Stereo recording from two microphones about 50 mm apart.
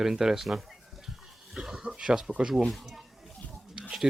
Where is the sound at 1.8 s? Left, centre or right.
Centre.